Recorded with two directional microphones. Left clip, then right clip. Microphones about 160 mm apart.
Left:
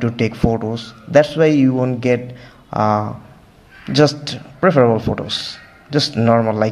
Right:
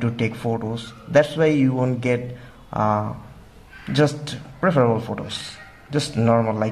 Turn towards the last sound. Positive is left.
turn(degrees=25)  # may be behind; listen again after turning